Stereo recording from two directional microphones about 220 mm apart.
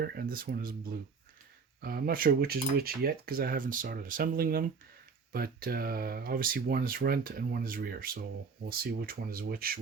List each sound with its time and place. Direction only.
0.0 s speech: 45° right (ahead or behind)